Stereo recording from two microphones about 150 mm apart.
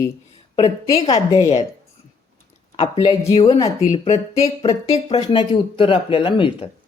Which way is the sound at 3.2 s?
20° left (ahead or behind).